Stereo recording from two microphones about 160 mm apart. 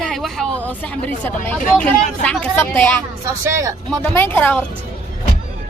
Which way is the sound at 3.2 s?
20° right (ahead or behind).